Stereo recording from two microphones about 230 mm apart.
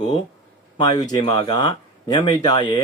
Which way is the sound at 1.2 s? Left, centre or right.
Left.